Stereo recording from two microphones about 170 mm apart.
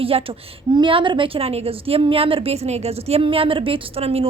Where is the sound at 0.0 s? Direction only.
35° right (ahead or behind).